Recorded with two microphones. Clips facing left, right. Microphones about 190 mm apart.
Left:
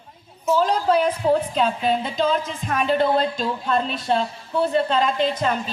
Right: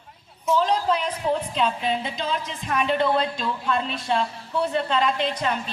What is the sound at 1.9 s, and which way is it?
Speech, 45° left (ahead or behind).